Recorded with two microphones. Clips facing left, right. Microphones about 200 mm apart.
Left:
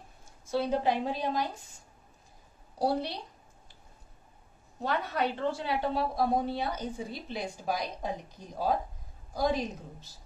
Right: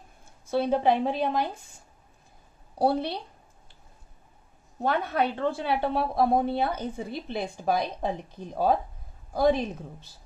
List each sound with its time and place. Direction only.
0.5 s a woman's voice: 55° right (ahead or behind)
2.8 s a woman's voice: 60° right (ahead or behind)
4.8 s a woman's voice: 55° right (ahead or behind)
9.3 s a woman's voice: 60° right (ahead or behind)